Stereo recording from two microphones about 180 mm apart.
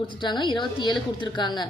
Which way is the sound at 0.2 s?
25° left (ahead or behind).